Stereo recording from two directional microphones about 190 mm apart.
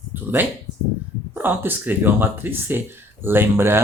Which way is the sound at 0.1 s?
10° right (ahead or behind).